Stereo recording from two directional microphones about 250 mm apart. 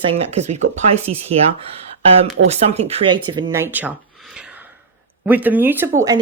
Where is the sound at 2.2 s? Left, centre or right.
Right; by 3.9 s centre.